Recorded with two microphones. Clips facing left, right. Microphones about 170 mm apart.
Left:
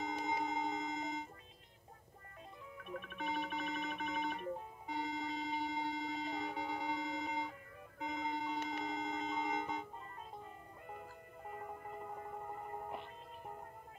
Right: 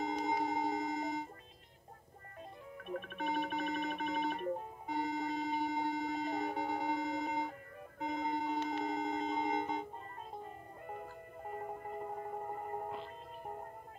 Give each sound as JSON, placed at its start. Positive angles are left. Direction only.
{"t": 0.0, "sound": "music", "side_deg": -35}
{"t": 2.8, "sound": "music", "side_deg": -50}
{"t": 10.4, "sound": "music", "side_deg": -45}